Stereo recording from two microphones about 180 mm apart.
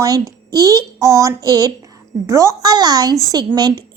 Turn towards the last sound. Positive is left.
turn(degrees=-25)  # may be behind; listen again after turning